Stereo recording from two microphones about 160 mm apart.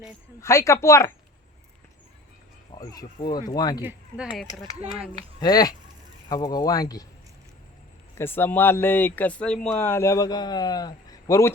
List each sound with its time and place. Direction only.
0.4 s speech: 20° left (ahead or behind)
2.7 s a man's voice: 25° left (ahead or behind)
3.8 s speech: 10° right (ahead or behind)
5.1 s a man's voice: 25° left (ahead or behind)
8.2 s a man's voice: 15° left (ahead or behind)